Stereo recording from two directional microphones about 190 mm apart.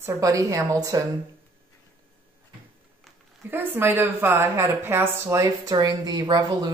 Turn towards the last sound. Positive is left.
turn(degrees=-20)  # may be behind; listen again after turning